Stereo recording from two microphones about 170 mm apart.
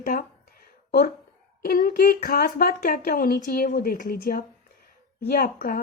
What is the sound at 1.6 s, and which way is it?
Speech, 55° left (ahead or behind).